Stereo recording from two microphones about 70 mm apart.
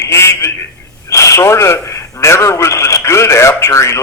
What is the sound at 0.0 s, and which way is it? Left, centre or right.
A man's voice, left.